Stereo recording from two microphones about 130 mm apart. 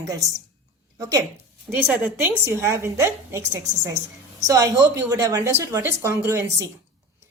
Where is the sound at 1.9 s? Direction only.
15° right (ahead or behind).